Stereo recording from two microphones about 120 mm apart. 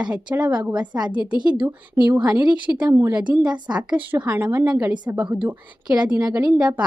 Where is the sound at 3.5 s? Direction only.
35° right (ahead or behind).